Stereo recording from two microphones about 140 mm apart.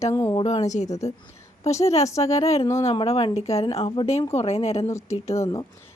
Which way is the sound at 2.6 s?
20° left (ahead or behind).